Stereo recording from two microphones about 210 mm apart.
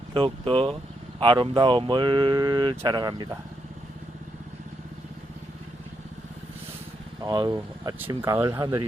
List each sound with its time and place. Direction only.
0.1 s speech: 25° right (ahead or behind)
7.2 s speech: 15° right (ahead or behind)